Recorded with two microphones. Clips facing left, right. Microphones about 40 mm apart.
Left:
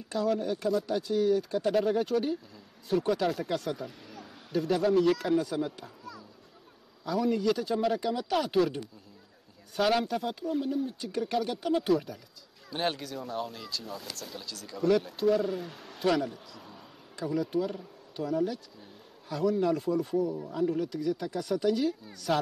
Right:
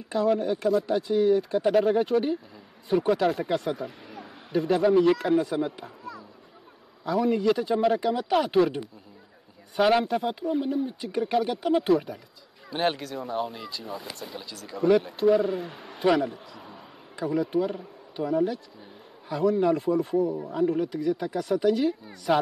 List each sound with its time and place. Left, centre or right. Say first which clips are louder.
0.1 s a man's voice: right 5 dB; centre